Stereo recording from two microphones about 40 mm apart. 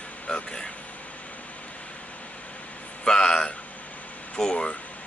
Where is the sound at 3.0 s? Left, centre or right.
Centre.